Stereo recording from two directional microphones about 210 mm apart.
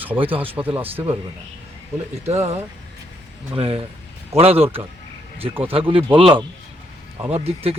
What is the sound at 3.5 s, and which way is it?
Speech, 25° right (ahead or behind).